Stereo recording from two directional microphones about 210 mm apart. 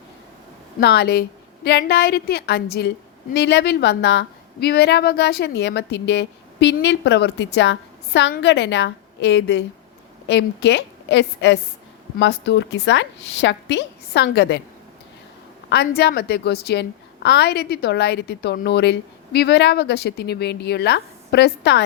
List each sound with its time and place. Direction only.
0.8 s a woman's voice: 55° left (ahead or behind)
15.7 s a woman's voice: 50° left (ahead or behind)